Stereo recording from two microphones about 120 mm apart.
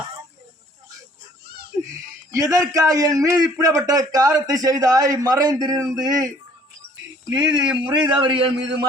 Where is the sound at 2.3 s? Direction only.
30° right (ahead or behind).